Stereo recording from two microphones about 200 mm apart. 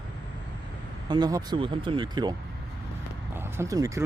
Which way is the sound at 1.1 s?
20° right (ahead or behind).